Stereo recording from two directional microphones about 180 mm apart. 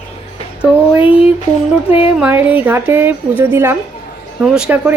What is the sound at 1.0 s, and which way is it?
Speech, 30° left (ahead or behind).